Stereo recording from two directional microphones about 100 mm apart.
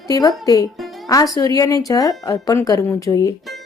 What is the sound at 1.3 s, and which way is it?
A woman's voice, 40° left (ahead or behind).